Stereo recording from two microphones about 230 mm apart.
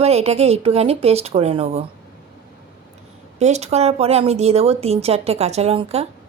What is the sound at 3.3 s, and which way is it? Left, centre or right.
A woman's voice, right.